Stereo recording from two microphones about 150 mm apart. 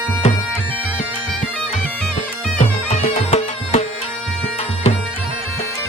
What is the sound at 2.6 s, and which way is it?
Music, 45° left (ahead or behind).